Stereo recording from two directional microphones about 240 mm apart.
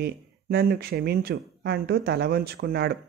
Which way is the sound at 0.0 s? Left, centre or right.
Right.